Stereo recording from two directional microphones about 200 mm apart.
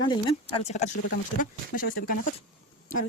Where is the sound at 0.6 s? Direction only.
35° left (ahead or behind).